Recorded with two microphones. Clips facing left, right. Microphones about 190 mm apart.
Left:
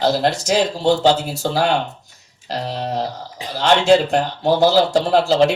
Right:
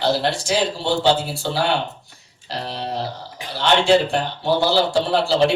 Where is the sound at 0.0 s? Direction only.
45° left (ahead or behind).